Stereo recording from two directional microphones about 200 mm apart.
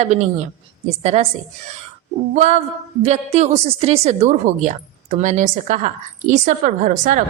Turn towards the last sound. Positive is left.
turn(degrees=-40)  # may be behind; listen again after turning